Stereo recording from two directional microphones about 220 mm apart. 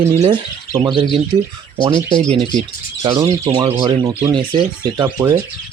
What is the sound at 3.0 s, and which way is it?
Speech, 20° right (ahead or behind).